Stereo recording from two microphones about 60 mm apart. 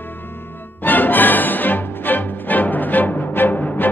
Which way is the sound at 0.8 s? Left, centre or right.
Left.